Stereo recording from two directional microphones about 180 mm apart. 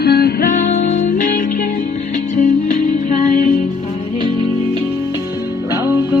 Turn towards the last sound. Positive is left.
turn(degrees=-10)  # may be behind; listen again after turning